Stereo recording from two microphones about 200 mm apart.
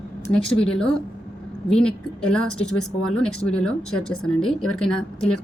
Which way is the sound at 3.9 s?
90° left.